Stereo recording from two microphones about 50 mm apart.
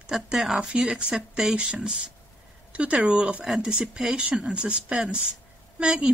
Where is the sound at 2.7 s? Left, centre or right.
Right.